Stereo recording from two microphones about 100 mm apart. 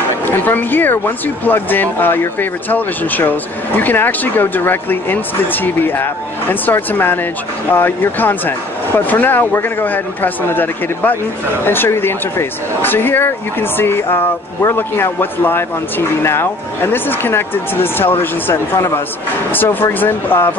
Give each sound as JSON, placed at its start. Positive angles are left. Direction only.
{"t": 0.3, "sound": "speech", "side_deg": 20}